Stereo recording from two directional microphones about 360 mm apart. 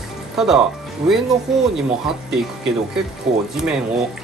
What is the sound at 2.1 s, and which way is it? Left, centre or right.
Speech, centre.